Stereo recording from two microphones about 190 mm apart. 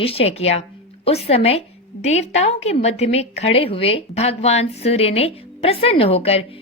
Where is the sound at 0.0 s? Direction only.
30° left (ahead or behind).